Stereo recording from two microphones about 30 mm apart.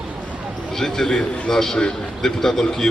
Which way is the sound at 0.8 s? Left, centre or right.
Centre.